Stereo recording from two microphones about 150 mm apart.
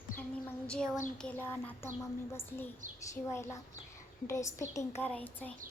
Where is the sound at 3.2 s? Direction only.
20° left (ahead or behind).